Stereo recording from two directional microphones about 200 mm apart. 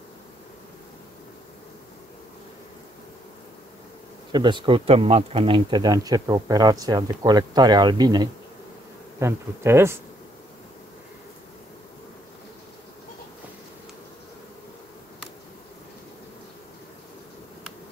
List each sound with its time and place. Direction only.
4.3 s speech: 20° right (ahead or behind)
9.2 s bee: 15° right (ahead or behind)